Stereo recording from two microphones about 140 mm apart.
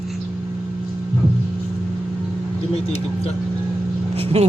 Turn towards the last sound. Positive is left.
turn(degrees=-45)  # may be behind; listen again after turning